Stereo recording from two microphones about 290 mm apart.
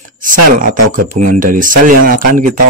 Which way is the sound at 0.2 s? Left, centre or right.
Right.